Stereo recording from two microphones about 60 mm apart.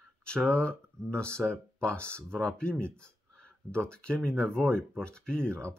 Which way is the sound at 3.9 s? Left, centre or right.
Centre.